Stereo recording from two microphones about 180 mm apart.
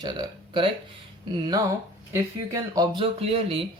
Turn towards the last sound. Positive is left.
turn(degrees=-30)  # may be behind; listen again after turning